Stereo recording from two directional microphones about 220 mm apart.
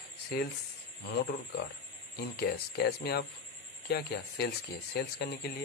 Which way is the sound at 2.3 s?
45° left (ahead or behind).